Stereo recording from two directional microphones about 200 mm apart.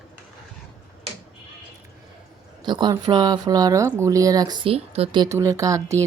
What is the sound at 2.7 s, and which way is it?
Speech, 20° right (ahead or behind).